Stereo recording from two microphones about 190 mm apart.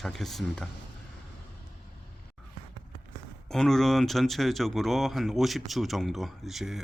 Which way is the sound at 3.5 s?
Centre (ahead or behind).